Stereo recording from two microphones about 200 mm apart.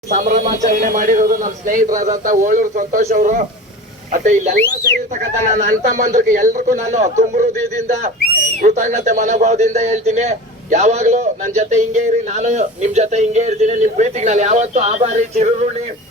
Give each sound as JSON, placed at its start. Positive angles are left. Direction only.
{"t": 0.1, "sound": "speech", "side_deg": -35}
{"t": 6.0, "sound": "speech", "side_deg": -40}
{"t": 8.6, "sound": "speech", "side_deg": -40}